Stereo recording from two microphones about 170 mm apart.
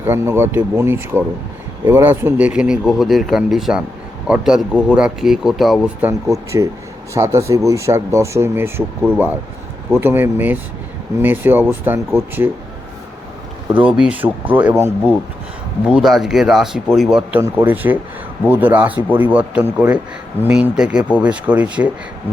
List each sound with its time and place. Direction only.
0.0 s speech: 15° right (ahead or behind)
13.8 s speech: 5° right (ahead or behind)
17.4 s speech: 15° right (ahead or behind)